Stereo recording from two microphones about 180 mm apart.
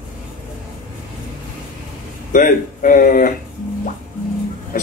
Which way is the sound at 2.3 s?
50° left (ahead or behind).